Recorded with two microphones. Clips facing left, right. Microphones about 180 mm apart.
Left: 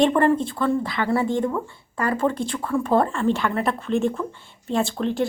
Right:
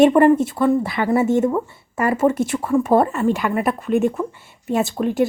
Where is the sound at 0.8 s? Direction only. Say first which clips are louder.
Right 4 dB; 20° right (ahead or behind).